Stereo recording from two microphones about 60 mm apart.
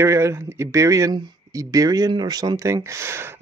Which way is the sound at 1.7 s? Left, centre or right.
Right.